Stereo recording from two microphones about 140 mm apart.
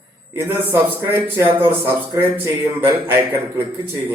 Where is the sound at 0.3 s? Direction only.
15° right (ahead or behind).